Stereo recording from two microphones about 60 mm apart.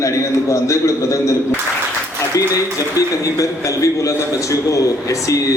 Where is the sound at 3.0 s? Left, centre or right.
Left.